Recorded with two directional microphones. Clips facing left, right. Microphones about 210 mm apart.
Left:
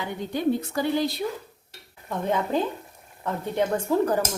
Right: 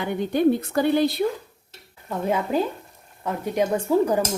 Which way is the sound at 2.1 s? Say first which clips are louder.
Right 2 dB; 10° right (ahead or behind).